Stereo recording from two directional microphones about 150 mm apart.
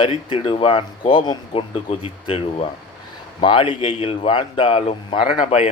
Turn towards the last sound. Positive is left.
turn(degrees=55)  # may be behind; listen again after turning